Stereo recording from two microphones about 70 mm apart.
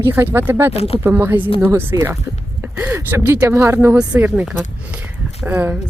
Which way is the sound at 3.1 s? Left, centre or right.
Right.